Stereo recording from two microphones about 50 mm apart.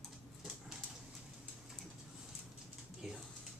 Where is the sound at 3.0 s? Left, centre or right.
Centre.